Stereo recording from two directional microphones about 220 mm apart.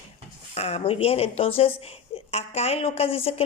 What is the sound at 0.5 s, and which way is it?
A woman's voice, 30° left (ahead or behind).